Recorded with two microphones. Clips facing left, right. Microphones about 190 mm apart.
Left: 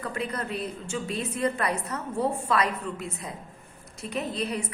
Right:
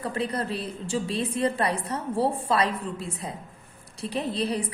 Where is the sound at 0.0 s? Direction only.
30° right (ahead or behind).